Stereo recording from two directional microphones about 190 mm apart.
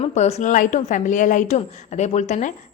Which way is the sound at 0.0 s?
35° left (ahead or behind).